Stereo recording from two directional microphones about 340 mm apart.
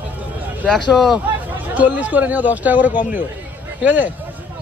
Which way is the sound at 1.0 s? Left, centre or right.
Centre.